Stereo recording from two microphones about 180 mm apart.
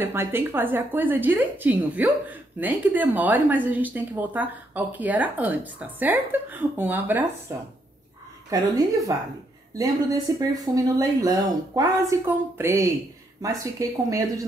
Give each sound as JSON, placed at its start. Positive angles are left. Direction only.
{"t": 0.0, "sound": "a woman's voice", "side_deg": -10}